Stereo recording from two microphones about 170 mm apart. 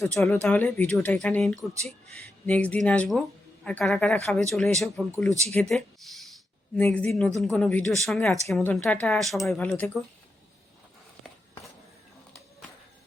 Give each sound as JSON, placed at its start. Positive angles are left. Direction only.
{"t": 0.0, "sound": "speech", "side_deg": 15}